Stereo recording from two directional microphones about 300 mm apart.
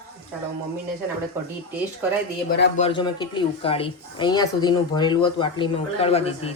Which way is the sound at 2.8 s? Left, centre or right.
Centre.